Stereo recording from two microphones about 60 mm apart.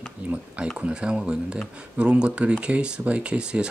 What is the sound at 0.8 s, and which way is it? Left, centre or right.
Speech, centre.